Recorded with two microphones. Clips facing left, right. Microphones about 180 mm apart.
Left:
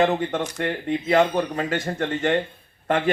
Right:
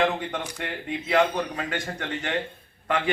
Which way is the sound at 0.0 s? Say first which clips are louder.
Left 4 dB; 40° left (ahead or behind).